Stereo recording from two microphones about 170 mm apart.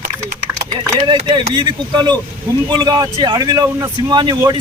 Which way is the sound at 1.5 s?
25° right (ahead or behind).